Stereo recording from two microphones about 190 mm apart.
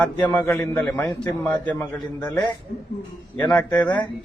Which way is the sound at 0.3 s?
10° left (ahead or behind).